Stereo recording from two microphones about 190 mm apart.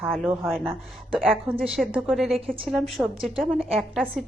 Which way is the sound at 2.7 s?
Centre (ahead or behind).